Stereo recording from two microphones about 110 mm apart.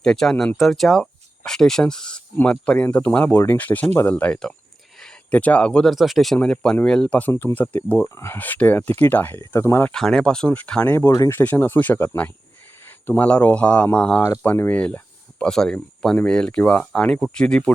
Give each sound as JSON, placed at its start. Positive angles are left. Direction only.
{"t": 0.0, "sound": "speech", "side_deg": 5}
{"t": 8.4, "sound": "speech", "side_deg": 15}
{"t": 9.9, "sound": "speech", "side_deg": 5}